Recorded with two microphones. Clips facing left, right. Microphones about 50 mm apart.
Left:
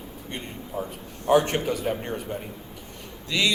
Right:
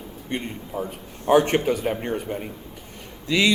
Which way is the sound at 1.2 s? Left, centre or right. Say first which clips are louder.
Right 3 dB; right.